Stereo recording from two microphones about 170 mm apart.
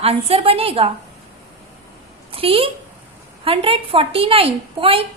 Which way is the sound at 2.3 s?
35° right (ahead or behind).